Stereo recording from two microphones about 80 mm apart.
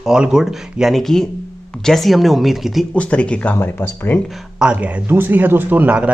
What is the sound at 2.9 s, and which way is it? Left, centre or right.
Speech, centre.